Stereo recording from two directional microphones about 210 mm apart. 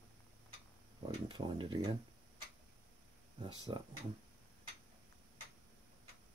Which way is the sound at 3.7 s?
20° right (ahead or behind).